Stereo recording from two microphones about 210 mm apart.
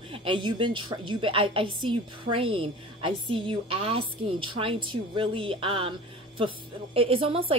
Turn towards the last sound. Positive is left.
turn(degrees=-25)  # may be behind; listen again after turning